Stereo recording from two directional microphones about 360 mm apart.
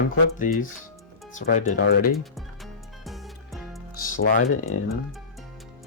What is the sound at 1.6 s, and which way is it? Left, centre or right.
Speech, left.